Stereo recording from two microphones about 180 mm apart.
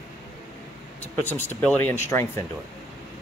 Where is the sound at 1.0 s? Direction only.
10° left (ahead or behind).